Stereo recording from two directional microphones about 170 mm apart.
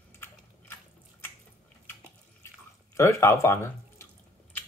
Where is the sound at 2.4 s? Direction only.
15° left (ahead or behind).